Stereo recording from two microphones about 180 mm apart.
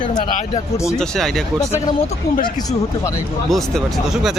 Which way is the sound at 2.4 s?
20° left (ahead or behind).